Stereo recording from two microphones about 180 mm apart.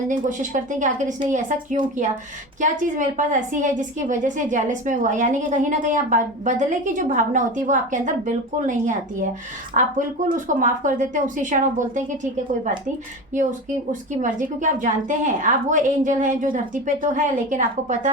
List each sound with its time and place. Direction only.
0.1 s a woman's voice: 45° right (ahead or behind)
13.3 s a woman's voice: 45° right (ahead or behind)